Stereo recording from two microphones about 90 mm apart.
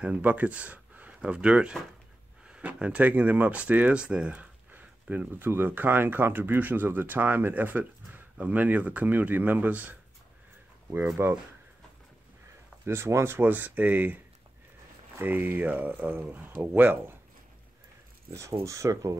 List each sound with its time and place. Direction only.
0.0 s speech: 15° right (ahead or behind)
11.2 s speech: 25° right (ahead or behind)
12.8 s speech: 30° right (ahead or behind)
18.3 s speech: 35° right (ahead or behind)